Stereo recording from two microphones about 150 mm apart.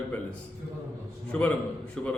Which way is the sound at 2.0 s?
5° left (ahead or behind).